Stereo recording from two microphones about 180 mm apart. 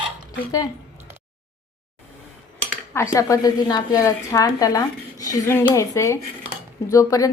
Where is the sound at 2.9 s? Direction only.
15° left (ahead or behind).